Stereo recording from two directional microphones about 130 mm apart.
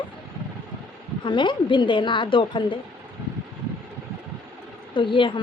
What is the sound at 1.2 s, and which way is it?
A woman's voice, 35° left (ahead or behind).